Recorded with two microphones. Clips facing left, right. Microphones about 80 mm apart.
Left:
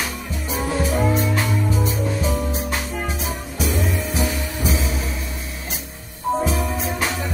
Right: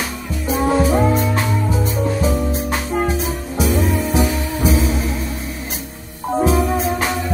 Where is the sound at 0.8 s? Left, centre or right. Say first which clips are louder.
Right 5 dB; right.